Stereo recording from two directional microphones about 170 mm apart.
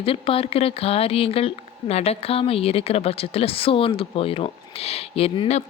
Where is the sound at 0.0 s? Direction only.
35° left (ahead or behind).